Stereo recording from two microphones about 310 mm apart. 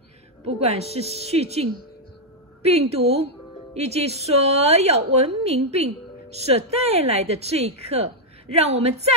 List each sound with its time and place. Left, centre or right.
0.6 s a woman's voice: centre